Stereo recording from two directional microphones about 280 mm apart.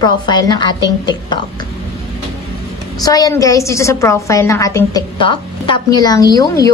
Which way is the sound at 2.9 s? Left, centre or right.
Centre.